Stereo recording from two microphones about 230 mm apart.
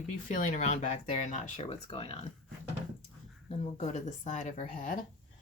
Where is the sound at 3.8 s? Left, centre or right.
Left.